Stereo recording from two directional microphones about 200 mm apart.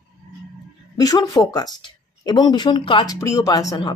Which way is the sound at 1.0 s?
20° left (ahead or behind).